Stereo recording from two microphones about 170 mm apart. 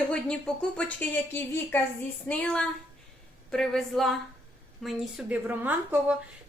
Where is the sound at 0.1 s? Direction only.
5° left (ahead or behind).